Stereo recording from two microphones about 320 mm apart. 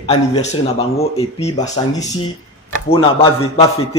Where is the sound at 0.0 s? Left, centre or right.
Centre.